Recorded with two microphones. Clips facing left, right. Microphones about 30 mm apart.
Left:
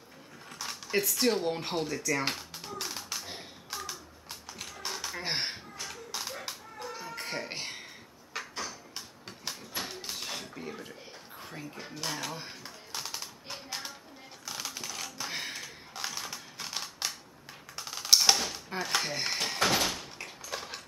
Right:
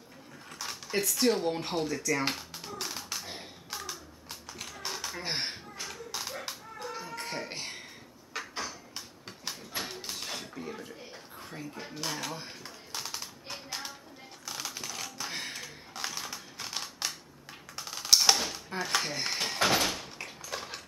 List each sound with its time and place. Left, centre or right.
0.5 s a sound: centre
14.4 s typing: centre
17.7 s dishes: centre